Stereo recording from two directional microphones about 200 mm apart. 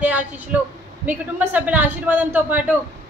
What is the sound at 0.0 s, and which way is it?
Speech, 5° right (ahead or behind).